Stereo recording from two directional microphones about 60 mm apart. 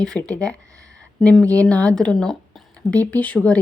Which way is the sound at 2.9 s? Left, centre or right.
Left.